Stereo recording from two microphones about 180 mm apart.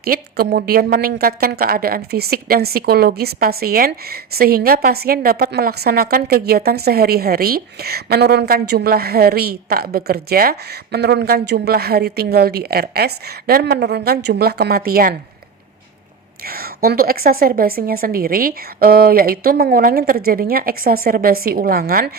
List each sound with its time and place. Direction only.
0.0 s a woman's voice: 60° right (ahead or behind)
16.4 s a woman's voice: 55° right (ahead or behind)